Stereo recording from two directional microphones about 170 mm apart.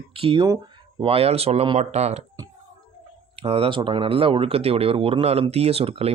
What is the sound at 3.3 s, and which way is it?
Speech, 35° right (ahead or behind).